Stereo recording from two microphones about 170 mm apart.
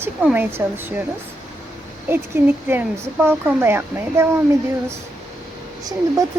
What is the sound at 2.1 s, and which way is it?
Speech, 10° right (ahead or behind).